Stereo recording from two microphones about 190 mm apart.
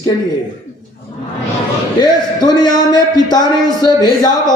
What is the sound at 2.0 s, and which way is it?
Speech, 20° left (ahead or behind).